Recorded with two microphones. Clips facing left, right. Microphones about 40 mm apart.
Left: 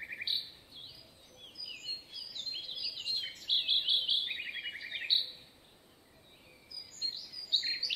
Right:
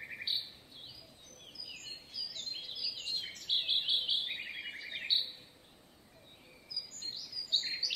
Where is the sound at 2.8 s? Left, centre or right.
Left.